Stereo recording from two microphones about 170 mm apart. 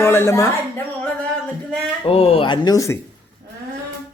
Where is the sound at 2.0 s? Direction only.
35° left (ahead or behind); by 3.0 s 20° left (ahead or behind).